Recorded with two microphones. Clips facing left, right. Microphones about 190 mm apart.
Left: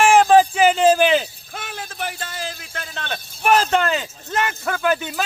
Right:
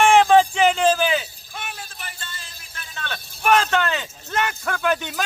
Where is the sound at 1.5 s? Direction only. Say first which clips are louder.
Left 5 dB; 90° left.